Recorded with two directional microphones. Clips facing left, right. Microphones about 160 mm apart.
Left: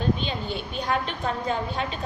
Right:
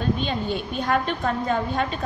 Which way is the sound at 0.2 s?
50° right (ahead or behind).